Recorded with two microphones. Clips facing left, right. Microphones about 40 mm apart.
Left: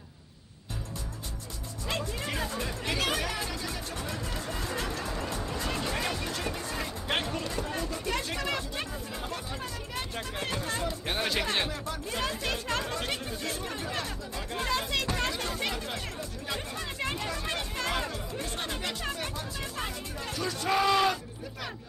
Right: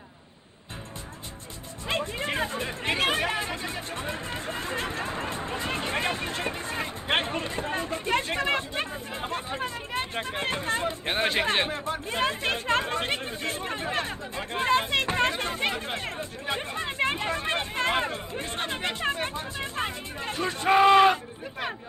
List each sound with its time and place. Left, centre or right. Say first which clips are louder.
1.9 s speech: right 5 dB; right